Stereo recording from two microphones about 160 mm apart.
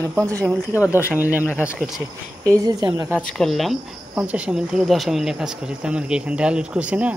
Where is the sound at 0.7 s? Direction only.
20° left (ahead or behind).